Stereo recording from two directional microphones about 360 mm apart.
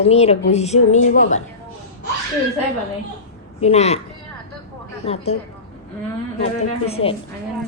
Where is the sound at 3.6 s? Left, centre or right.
Centre.